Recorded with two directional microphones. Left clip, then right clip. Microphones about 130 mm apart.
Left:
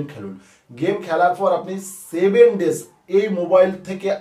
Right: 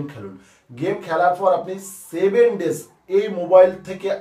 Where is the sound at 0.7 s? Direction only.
20° left (ahead or behind).